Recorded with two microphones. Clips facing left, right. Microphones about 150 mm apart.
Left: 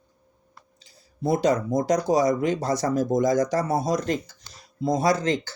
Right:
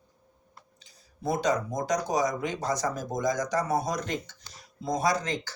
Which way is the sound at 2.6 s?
25° left (ahead or behind).